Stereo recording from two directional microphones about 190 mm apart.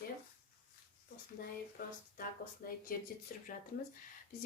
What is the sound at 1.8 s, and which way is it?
Speech, 50° left (ahead or behind).